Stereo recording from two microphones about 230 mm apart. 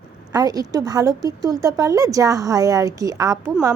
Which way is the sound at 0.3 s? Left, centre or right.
Centre.